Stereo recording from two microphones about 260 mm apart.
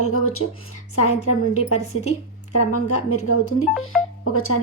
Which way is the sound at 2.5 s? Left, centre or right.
Left.